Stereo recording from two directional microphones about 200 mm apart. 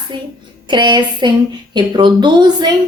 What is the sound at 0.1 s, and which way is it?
A woman's voice, 25° right (ahead or behind).